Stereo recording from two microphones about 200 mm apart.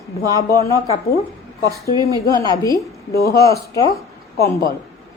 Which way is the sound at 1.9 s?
15° left (ahead or behind).